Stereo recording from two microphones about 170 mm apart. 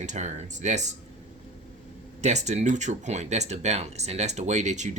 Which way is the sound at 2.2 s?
40° right (ahead or behind).